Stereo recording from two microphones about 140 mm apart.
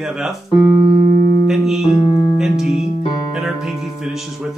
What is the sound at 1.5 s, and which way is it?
Music, centre (ahead or behind).